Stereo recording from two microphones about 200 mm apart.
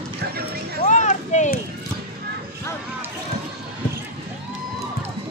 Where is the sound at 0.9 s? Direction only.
35° left (ahead or behind).